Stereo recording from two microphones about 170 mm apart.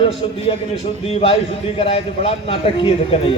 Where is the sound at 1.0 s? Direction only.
35° left (ahead or behind).